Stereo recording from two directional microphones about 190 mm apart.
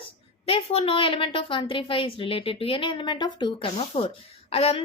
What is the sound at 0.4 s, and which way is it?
A woman's voice, 30° left (ahead or behind).